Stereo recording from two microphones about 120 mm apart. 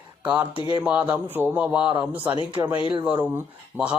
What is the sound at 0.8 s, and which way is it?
Speech, 15° right (ahead or behind).